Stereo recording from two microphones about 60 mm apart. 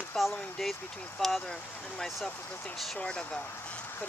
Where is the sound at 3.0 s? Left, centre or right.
Centre.